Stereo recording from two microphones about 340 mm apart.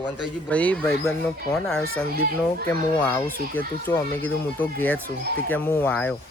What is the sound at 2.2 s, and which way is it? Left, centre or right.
Speech, right.